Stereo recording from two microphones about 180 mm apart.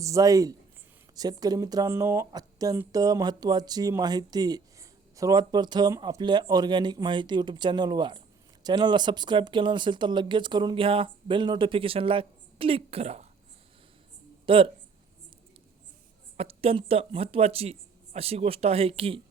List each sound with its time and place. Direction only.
0.0 s speech: 20° right (ahead or behind); by 13.2 s 35° right (ahead or behind)
14.4 s speech: 30° right (ahead or behind)
16.4 s speech: 35° right (ahead or behind)